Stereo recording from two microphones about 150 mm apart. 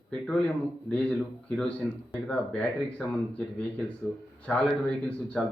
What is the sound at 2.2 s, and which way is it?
Speech, 5° left (ahead or behind).